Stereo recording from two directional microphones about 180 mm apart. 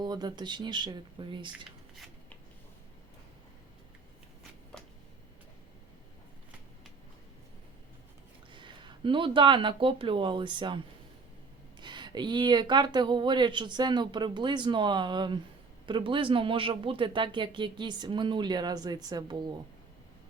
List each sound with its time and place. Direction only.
0.0 s speech: 25° right (ahead or behind)
8.5 s speech: 25° right (ahead or behind)
11.8 s speech: 25° right (ahead or behind)